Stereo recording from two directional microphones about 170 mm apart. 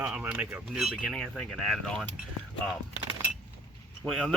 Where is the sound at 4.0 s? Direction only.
5° left (ahead or behind).